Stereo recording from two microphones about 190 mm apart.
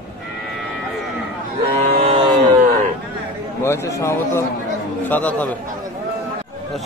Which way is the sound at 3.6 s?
15° left (ahead or behind).